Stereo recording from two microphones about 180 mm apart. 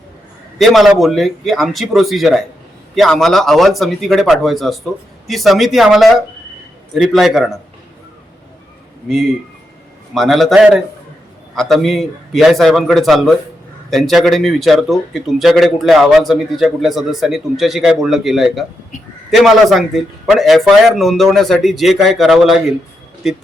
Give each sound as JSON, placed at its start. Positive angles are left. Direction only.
{"t": 0.6, "sound": "a man's voice", "side_deg": 0}
{"t": 10.2, "sound": "a man's voice", "side_deg": 0}